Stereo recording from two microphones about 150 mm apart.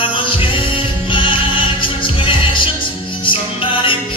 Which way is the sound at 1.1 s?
35° left (ahead or behind).